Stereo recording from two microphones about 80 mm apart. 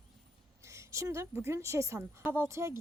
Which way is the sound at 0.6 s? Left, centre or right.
Right.